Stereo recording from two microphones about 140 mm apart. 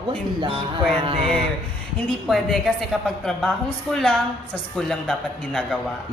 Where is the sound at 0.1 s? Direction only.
40° right (ahead or behind).